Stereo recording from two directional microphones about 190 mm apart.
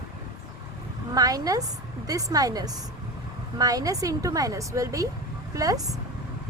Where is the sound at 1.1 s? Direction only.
20° right (ahead or behind).